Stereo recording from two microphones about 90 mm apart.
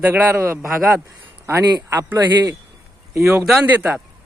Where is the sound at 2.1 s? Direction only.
40° right (ahead or behind).